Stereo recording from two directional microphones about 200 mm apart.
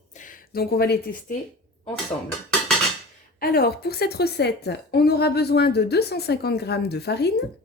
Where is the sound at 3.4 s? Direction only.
50° left (ahead or behind).